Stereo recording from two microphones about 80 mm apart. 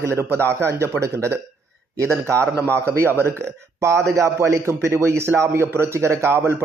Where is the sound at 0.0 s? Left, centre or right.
Right.